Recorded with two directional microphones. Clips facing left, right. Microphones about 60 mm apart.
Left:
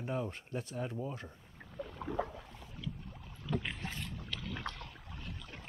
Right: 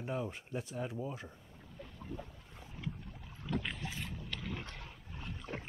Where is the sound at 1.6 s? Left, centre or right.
Left.